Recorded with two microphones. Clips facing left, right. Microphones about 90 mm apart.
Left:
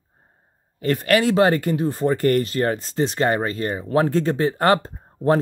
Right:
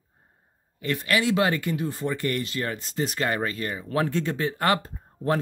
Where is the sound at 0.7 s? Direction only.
45° left (ahead or behind).